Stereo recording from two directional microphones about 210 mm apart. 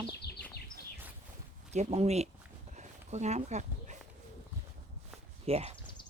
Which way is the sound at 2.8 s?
35° right (ahead or behind).